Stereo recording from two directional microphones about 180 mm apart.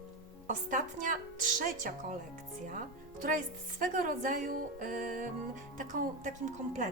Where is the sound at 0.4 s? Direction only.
45° right (ahead or behind).